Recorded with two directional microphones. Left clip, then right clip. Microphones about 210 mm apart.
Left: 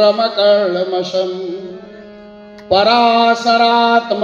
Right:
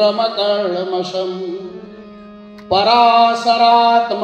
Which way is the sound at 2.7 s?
35° left (ahead or behind).